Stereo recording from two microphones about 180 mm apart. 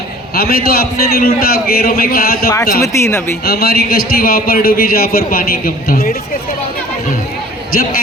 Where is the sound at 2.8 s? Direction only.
15° left (ahead or behind).